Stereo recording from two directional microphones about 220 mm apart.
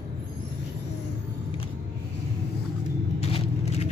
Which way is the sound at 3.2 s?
30° left (ahead or behind).